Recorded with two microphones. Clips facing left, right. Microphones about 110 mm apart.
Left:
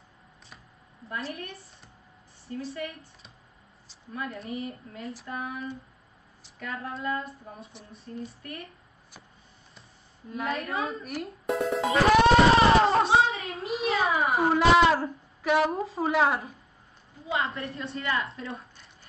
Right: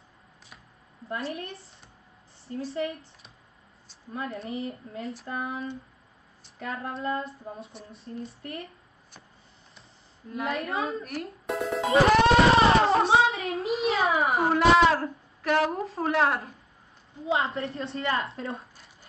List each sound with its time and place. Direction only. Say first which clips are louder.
1.0 s female singing: right 2 dB; 30° right (ahead or behind)
2.7 s female singing: right 5 dB; 30° right (ahead or behind)
4.1 s female singing: right 1 dB; 25° right (ahead or behind)
10.3 s a woman's voice: right 1 dB; centre (ahead or behind)
12.0 s a sound: even; centre (ahead or behind)
17.6 s female singing: right 4 dB; 30° right (ahead or behind)
17.9 s a woman's voice: right 1 dB; 30° right (ahead or behind)